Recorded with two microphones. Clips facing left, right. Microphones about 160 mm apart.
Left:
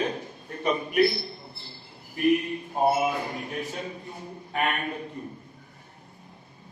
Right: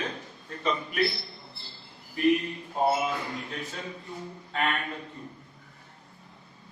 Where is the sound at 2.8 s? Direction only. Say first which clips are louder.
Left 3 dB; 15° left (ahead or behind).